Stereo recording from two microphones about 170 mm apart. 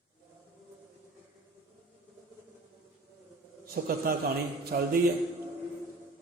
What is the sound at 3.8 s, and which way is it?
A man's voice, 55° right (ahead or behind).